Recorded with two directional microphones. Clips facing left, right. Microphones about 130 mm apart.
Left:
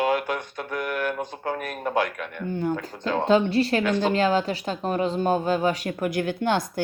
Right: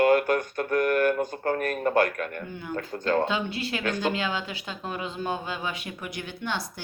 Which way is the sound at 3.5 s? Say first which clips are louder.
Left 8 dB; 35° left (ahead or behind).